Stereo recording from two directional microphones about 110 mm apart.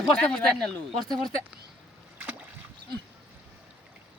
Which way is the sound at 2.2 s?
15° right (ahead or behind).